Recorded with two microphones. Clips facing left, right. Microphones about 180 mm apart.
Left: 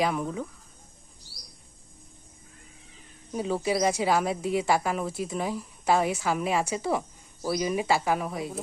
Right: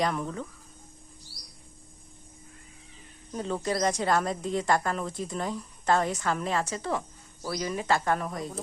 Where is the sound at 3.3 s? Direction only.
5° left (ahead or behind).